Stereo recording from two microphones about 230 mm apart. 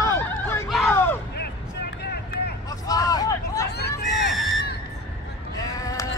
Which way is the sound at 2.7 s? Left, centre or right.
Centre.